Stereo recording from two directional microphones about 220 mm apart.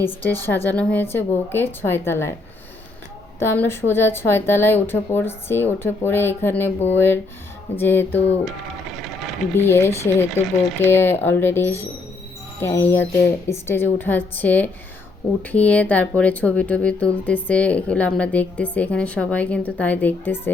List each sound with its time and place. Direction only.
0.0 s speech: 10° left (ahead or behind)
3.4 s speech: 10° left (ahead or behind)
9.6 s speech: 10° left (ahead or behind)